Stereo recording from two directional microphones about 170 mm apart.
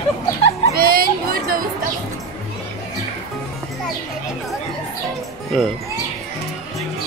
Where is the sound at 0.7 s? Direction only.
60° right (ahead or behind).